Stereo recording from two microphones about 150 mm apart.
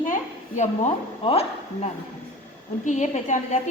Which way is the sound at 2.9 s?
55° left (ahead or behind).